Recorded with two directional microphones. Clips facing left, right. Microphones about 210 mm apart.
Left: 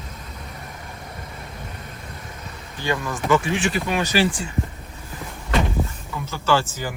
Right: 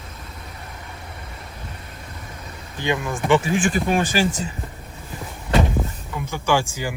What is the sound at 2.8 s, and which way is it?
Speech, 20° right (ahead or behind).